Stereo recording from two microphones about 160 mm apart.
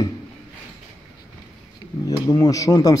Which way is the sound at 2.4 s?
20° left (ahead or behind).